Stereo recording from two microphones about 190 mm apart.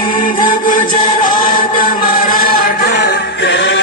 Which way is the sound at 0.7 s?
45° left (ahead or behind).